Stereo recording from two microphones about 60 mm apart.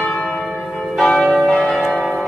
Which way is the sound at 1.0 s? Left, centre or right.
Centre.